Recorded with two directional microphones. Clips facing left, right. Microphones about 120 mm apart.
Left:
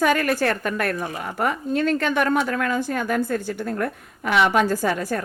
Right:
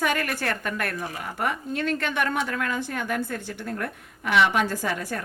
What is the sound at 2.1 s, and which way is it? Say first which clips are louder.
A woman's voice: left 5 dB; 40° left (ahead or behind).